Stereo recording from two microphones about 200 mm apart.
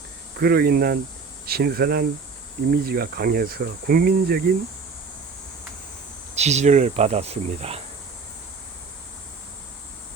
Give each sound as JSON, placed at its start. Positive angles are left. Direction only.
{"t": 0.3, "sound": "speech", "side_deg": -50}
{"t": 6.3, "sound": "speech", "side_deg": -35}